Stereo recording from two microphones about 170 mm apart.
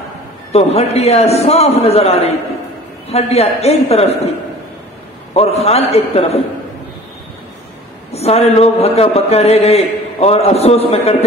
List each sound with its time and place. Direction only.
0.5 s speech: 35° left (ahead or behind)
5.3 s speech: 35° left (ahead or behind)
8.1 s speech: 35° left (ahead or behind)